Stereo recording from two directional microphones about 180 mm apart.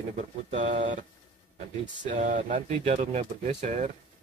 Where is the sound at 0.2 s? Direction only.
40° right (ahead or behind).